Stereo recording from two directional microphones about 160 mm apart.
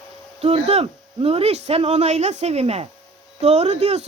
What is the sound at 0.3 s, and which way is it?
Speech, 40° right (ahead or behind).